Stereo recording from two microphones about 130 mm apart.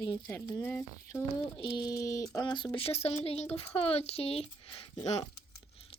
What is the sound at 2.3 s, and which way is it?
Speech, 35° left (ahead or behind).